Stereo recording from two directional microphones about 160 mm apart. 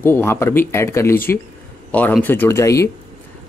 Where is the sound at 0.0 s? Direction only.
15° left (ahead or behind).